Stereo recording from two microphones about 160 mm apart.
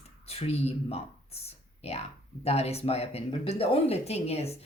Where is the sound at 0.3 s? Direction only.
40° left (ahead or behind).